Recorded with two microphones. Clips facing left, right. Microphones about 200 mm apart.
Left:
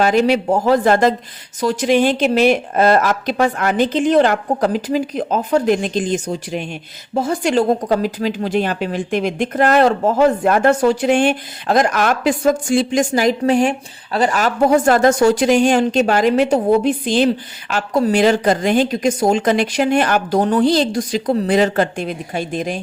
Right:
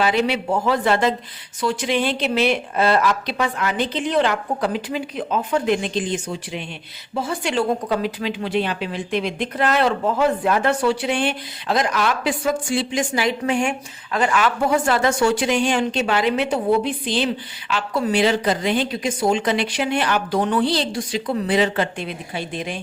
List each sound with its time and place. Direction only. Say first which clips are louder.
0.0 s speech: left 6 dB; 45° left (ahead or behind)